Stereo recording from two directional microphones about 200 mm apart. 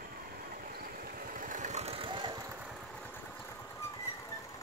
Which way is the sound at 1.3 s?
40° right (ahead or behind).